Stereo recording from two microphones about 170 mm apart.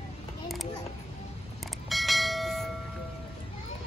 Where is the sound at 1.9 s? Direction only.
Centre (ahead or behind).